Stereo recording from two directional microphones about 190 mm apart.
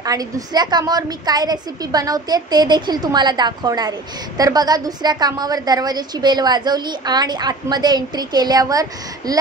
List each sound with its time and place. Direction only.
0.0 s a woman's voice: 20° right (ahead or behind)